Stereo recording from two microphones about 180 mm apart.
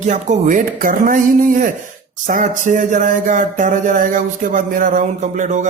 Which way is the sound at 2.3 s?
45° right (ahead or behind).